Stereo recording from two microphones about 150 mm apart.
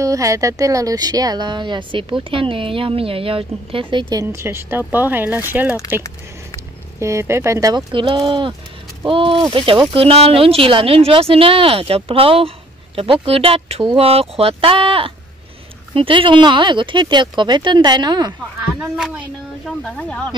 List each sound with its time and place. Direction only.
0.0 s speech: 20° right (ahead or behind)
7.0 s speech: 20° right (ahead or behind)
7.9 s speech: 35° right (ahead or behind)
18.8 s speech: 5° right (ahead or behind)
19.8 s speech: 5° left (ahead or behind)